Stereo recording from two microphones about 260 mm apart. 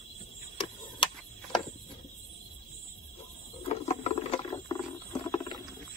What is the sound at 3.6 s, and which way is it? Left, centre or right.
Rodents, left.